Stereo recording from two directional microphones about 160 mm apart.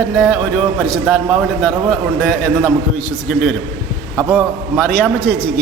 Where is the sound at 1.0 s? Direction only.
5° right (ahead or behind).